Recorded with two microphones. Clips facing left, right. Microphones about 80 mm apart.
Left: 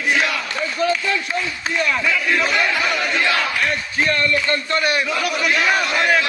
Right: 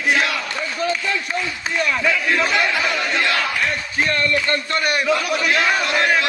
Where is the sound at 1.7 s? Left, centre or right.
Centre.